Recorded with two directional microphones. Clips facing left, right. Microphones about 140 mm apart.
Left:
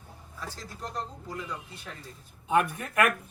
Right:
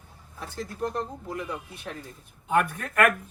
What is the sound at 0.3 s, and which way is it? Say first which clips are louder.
Speech: right 8 dB; 60° right (ahead or behind).